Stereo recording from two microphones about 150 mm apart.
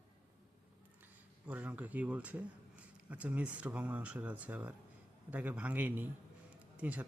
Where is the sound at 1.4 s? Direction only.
10° right (ahead or behind).